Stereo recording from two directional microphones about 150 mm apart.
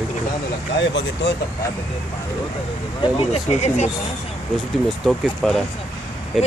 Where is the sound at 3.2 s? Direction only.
50° left (ahead or behind).